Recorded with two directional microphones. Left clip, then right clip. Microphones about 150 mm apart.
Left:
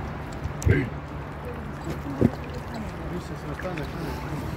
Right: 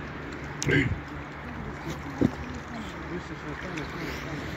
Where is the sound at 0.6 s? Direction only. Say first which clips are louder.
Right 1 dB; centre (ahead or behind).